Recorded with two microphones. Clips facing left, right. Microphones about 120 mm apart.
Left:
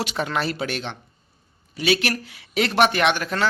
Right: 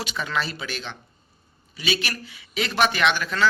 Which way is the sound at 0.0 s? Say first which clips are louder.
Left 3 dB; 65° left (ahead or behind).